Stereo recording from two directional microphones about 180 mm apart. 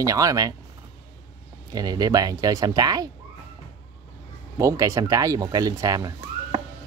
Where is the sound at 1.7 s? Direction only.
20° right (ahead or behind).